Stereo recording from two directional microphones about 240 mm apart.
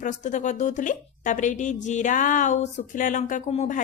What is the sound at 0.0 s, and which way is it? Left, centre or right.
A woman's voice, left.